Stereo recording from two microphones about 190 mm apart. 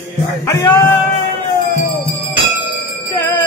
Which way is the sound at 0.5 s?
20° left (ahead or behind).